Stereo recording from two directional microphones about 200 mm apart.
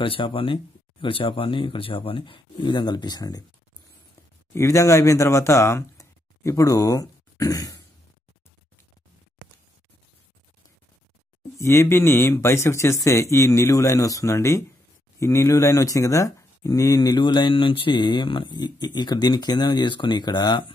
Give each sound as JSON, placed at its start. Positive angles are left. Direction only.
{"t": 0.0, "sound": "speech", "side_deg": 25}
{"t": 4.6, "sound": "speech", "side_deg": 15}
{"t": 11.5, "sound": "speech", "side_deg": 15}